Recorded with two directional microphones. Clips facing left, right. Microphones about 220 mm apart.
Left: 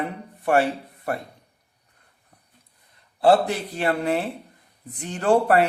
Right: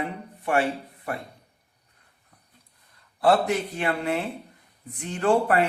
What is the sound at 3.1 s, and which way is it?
A man's voice, 30° left (ahead or behind).